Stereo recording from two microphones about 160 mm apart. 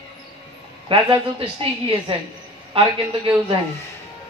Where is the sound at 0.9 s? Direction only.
35° right (ahead or behind).